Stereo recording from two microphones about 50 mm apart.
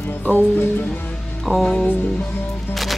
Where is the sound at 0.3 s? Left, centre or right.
Left.